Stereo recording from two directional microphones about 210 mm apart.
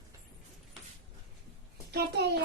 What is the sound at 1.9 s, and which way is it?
Speech, 50° right (ahead or behind).